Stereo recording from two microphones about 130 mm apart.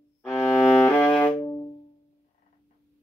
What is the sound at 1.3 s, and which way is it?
Music, 15° left (ahead or behind).